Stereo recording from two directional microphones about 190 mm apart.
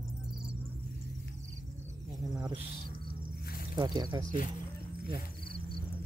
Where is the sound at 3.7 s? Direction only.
20° right (ahead or behind).